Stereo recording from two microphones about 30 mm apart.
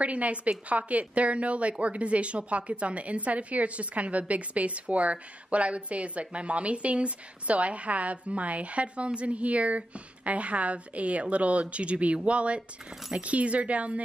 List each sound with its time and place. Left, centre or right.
0.0 s a woman's voice: right